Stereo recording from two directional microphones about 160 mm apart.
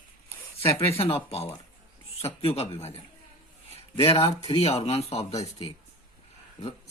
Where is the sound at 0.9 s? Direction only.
40° left (ahead or behind).